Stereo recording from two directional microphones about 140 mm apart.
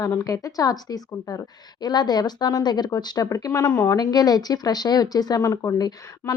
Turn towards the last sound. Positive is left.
turn(degrees=25)  # may be behind; listen again after turning